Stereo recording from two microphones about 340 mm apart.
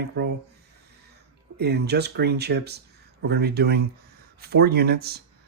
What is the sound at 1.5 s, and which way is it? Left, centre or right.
Speech, right.